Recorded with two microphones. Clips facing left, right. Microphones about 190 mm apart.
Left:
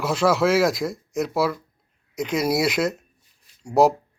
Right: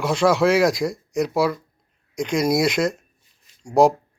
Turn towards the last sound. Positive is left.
turn(degrees=5)  # may be behind; listen again after turning